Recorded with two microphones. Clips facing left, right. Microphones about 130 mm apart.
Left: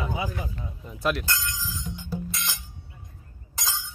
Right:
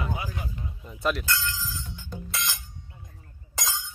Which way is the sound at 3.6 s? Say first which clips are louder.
Left 1 dB; centre (ahead or behind).